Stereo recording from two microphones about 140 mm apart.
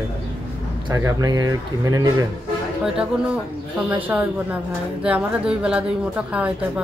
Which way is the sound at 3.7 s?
10° right (ahead or behind).